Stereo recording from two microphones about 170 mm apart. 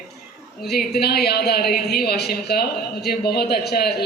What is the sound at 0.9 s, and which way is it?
A woman's voice, 70° left (ahead or behind).